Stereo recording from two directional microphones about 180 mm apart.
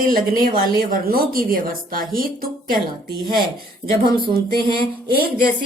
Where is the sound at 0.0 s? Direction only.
50° right (ahead or behind).